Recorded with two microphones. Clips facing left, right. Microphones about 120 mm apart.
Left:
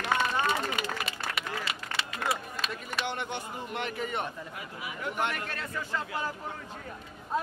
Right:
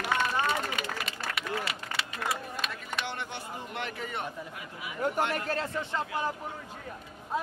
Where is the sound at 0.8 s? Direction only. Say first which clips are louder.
Left 1 dB; centre (ahead or behind).